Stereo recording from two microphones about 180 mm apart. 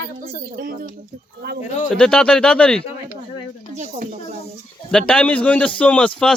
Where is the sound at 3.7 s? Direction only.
40° right (ahead or behind).